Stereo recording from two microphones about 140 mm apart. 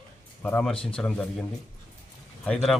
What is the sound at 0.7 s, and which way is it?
Speech, 40° left (ahead or behind).